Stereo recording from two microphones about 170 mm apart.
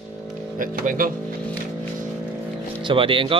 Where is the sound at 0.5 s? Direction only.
55° right (ahead or behind).